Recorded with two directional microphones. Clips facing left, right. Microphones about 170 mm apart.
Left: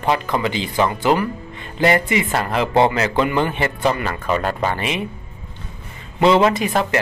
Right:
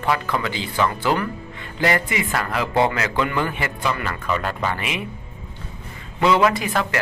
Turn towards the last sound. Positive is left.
turn(degrees=20)  # may be behind; listen again after turning